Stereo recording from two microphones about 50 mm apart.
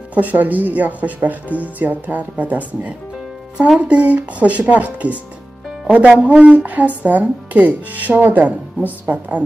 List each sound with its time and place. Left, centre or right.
0.1 s speech: right
3.5 s speech: centre